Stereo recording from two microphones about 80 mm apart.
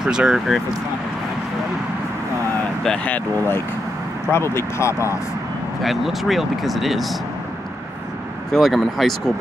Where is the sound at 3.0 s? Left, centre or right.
Left.